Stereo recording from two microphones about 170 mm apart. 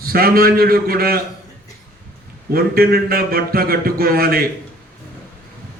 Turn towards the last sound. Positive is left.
turn(degrees=-60)  # may be behind; listen again after turning